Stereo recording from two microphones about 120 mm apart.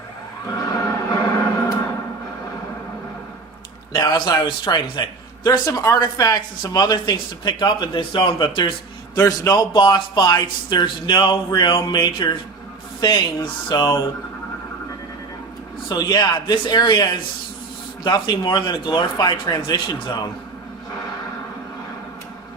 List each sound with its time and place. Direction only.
0.4 s music: 30° left (ahead or behind)
3.9 s a man's voice: 35° left (ahead or behind)
9.1 s a man's voice: 30° left (ahead or behind)
15.9 s a man's voice: 35° left (ahead or behind)